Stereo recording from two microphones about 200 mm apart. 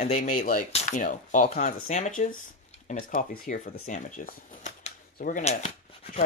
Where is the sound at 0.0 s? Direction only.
35° left (ahead or behind).